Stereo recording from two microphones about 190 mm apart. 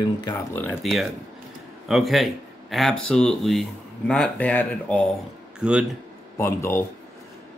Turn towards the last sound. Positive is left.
turn(degrees=15)  # may be behind; listen again after turning